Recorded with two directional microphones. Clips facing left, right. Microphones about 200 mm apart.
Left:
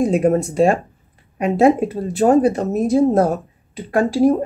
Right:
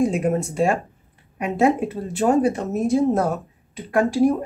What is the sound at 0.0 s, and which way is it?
Speech, 35° left (ahead or behind).